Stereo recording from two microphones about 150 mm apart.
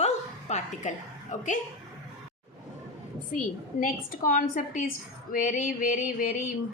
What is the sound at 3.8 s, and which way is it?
A woman's voice, 65° left (ahead or behind).